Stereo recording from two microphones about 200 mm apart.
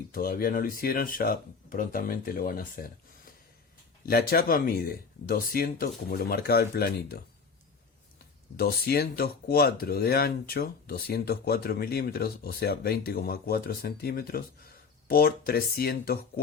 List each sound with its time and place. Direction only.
0.1 s speech: 45° left (ahead or behind)
4.0 s speech: 50° left (ahead or behind)
8.5 s speech: 50° left (ahead or behind)